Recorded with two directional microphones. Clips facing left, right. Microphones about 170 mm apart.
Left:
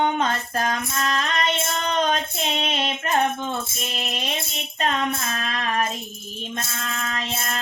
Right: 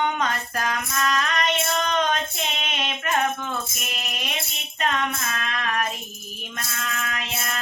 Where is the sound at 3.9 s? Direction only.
30° left (ahead or behind).